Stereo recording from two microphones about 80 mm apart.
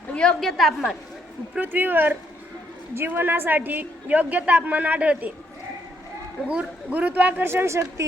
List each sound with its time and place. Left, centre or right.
0.1 s a woman's voice: centre
1.5 s a woman's voice: right
6.5 s a woman's voice: centre; by 8.0 s right